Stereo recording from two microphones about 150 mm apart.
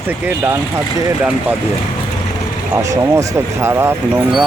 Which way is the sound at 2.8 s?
20° right (ahead or behind).